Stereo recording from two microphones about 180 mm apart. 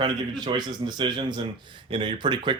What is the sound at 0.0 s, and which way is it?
Speech, 25° right (ahead or behind).